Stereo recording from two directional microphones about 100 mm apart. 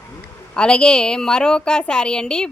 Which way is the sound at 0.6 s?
10° left (ahead or behind).